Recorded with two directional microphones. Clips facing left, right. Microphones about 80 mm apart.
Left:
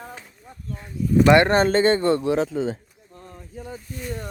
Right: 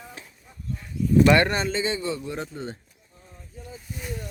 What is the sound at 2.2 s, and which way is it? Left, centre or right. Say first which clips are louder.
Speech: left 11 dB; left.